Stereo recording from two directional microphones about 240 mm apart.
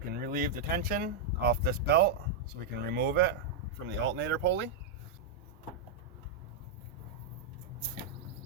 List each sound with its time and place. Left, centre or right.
0.1 s speech: right